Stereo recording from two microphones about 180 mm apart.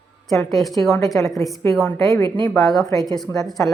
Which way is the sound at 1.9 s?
20° left (ahead or behind).